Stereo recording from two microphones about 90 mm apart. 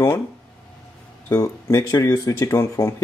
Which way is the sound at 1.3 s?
35° left (ahead or behind).